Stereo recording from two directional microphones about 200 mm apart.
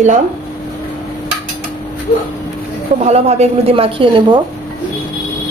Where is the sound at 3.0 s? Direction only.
35° right (ahead or behind).